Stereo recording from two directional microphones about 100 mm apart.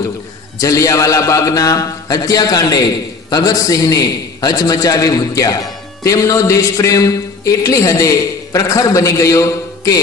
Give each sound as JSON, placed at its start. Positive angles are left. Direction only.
{"t": 0.6, "sound": "a man's voice", "side_deg": 35}